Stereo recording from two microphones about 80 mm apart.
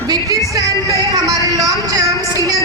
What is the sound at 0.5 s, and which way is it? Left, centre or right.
Music, right.